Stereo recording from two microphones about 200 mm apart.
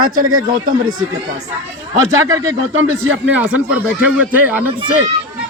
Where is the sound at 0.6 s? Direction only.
40° right (ahead or behind).